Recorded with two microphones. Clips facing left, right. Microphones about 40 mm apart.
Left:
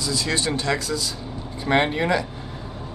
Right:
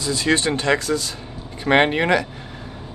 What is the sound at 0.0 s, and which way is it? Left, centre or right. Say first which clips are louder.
Speech: right 4 dB; right.